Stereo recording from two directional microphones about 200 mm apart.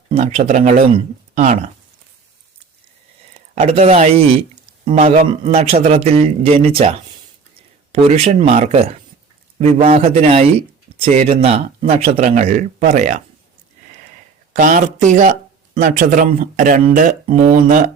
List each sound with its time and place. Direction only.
0.1 s speech: 35° right (ahead or behind)
3.5 s speech: 30° right (ahead or behind)
8.0 s speech: 35° right (ahead or behind)
14.5 s speech: 40° right (ahead or behind)